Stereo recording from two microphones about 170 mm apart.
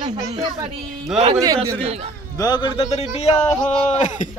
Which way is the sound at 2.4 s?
25° left (ahead or behind).